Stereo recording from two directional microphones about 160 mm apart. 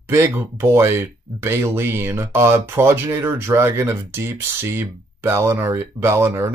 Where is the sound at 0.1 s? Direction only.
15° right (ahead or behind).